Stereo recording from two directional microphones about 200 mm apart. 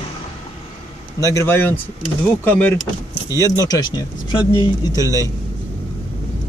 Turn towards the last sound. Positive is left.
turn(degrees=15)  # may be behind; listen again after turning